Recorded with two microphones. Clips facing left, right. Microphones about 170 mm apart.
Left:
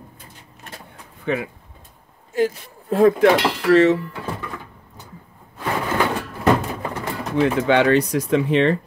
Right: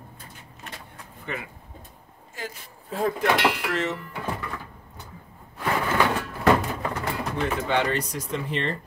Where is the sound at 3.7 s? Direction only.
90° left.